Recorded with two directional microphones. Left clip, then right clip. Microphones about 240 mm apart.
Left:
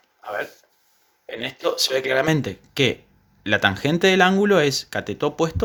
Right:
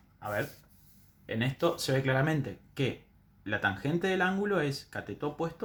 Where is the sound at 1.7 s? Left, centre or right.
Left.